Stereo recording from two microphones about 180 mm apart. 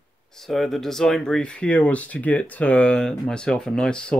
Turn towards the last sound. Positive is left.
turn(degrees=5)  # may be behind; listen again after turning